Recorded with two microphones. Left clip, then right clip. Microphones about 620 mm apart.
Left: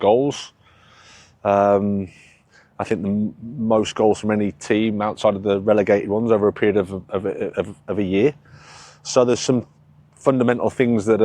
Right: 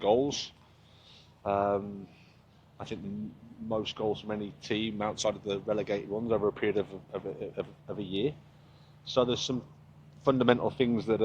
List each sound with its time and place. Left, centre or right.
0.0 s speech: left
1.4 s speech: left
2.7 s speech: left
3.7 s speech: left
4.3 s speech: left
10.2 s speech: left